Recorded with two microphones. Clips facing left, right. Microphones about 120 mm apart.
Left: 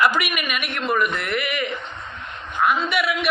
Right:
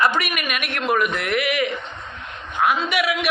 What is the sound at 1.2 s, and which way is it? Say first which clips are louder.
Speech: right 3 dB; 90° right.